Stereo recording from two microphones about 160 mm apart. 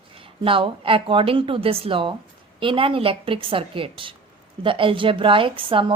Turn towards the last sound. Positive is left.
turn(degrees=-30)  # may be behind; listen again after turning